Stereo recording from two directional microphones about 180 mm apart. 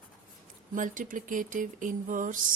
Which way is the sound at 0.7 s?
45° right (ahead or behind).